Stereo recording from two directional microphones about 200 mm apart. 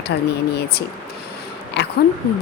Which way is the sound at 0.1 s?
55° left (ahead or behind).